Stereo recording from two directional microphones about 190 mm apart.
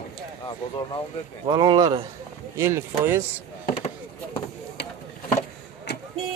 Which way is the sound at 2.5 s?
15° right (ahead or behind).